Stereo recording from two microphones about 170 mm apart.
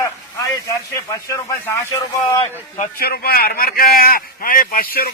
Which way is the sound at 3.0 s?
65° left (ahead or behind).